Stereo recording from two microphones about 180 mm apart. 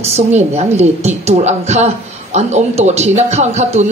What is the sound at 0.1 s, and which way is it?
Speech, 40° right (ahead or behind).